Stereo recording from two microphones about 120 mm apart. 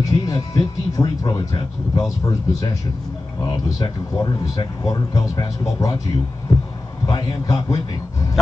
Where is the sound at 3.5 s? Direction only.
35° left (ahead or behind).